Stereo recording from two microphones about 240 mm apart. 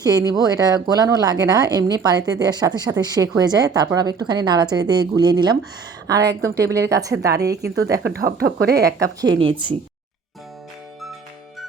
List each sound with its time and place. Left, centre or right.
0.0 s speech: centre
8.0 s speech: right
9.4 s speech: right